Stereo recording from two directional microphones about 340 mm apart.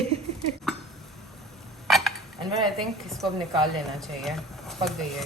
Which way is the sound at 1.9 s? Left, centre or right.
Centre.